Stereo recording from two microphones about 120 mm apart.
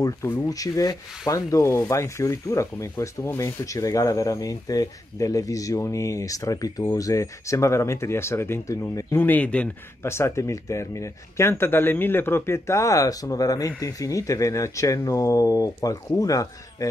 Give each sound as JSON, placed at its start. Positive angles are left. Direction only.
{"t": 0.0, "sound": "rub", "side_deg": 25}
{"t": 9.2, "sound": "speech", "side_deg": 15}
{"t": 10.0, "sound": "rub", "side_deg": 20}